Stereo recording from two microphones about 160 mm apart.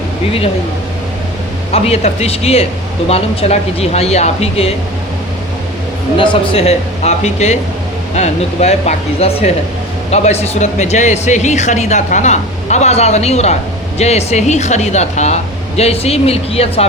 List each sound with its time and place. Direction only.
1.7 s a woman's voice: 40° left (ahead or behind)
6.1 s speech: 35° left (ahead or behind)